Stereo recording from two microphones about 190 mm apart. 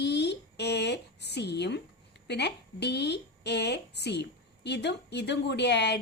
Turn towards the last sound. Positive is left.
turn(degrees=65)  # may be behind; listen again after turning